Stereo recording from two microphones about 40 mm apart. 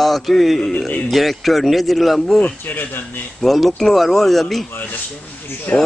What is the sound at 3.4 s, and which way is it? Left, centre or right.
A man's voice, centre.